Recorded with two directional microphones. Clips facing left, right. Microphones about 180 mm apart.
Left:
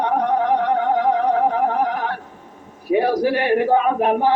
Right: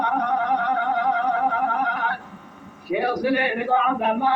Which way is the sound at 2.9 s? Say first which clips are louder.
Left 4 dB; 30° left (ahead or behind).